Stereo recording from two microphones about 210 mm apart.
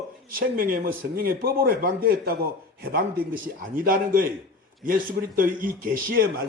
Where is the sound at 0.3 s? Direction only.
45° right (ahead or behind).